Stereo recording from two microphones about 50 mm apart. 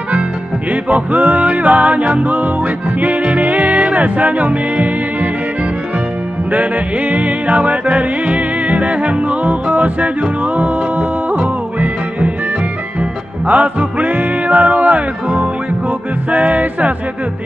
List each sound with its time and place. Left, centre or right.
0.8 s music: right
6.5 s music: right
13.5 s music: right